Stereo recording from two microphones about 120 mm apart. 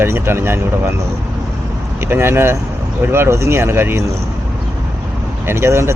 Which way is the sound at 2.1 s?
20° right (ahead or behind).